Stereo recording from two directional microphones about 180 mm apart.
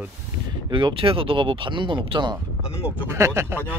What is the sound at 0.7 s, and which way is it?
Speech, 30° right (ahead or behind).